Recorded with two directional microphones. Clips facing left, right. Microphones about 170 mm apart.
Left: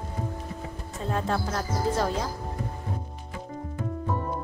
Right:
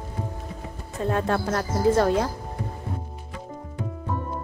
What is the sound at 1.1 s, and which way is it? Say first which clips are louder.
Speech: right 4 dB; 60° right (ahead or behind).